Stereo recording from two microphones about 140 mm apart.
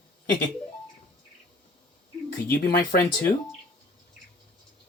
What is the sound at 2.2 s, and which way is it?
Speech, 90° left.